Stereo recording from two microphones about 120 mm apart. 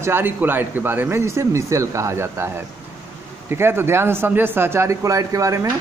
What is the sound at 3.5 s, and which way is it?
A man's voice, 20° right (ahead or behind).